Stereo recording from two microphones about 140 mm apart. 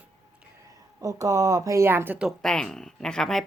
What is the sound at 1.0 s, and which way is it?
Speech, 25° right (ahead or behind).